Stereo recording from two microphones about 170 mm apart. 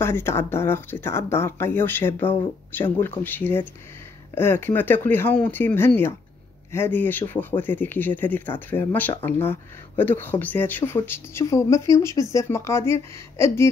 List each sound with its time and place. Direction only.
0.0 s speech: 15° left (ahead or behind)